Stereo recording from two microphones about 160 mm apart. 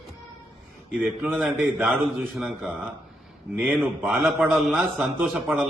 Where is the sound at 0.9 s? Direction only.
Centre (ahead or behind).